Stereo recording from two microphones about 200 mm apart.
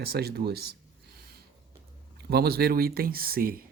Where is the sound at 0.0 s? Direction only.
50° right (ahead or behind).